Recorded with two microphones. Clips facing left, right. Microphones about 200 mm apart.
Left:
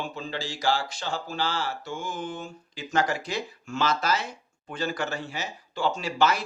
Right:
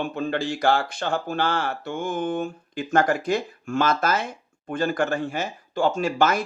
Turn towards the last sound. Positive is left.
turn(degrees=-50)  # may be behind; listen again after turning